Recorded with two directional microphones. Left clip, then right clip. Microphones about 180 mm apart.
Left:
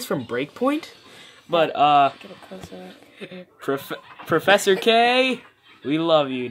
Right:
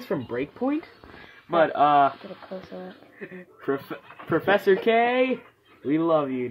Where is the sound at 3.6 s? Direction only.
15° left (ahead or behind).